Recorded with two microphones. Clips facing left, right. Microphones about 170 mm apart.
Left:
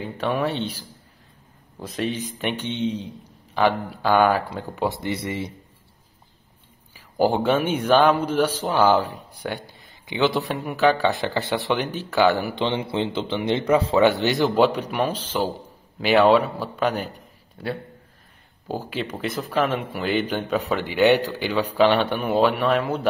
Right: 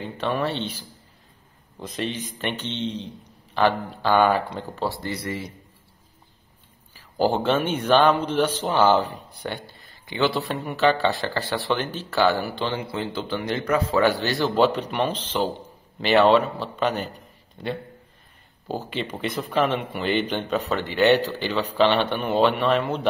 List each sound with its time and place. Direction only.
0.0 s speech: 10° left (ahead or behind)
4.8 s speech: 20° left (ahead or behind)
7.2 s speech: 15° left (ahead or behind)